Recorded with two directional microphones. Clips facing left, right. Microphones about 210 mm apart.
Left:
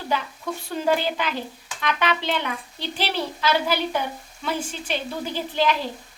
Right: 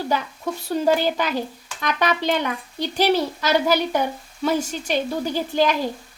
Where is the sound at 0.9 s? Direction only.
40° right (ahead or behind).